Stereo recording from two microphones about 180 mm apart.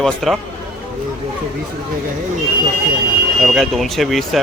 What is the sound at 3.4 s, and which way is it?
Speech, centre (ahead or behind).